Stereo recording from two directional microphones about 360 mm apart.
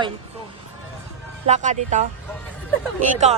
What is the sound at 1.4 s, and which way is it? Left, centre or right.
Speech, centre.